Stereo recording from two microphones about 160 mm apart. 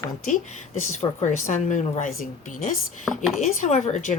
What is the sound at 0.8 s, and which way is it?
Speech, 45° left (ahead or behind).